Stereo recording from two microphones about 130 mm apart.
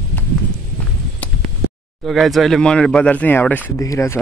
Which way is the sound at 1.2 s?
10° left (ahead or behind).